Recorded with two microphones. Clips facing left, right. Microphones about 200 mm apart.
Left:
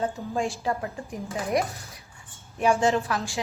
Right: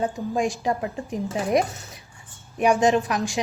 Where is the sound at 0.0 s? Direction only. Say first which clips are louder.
Right 3 dB; 15° right (ahead or behind).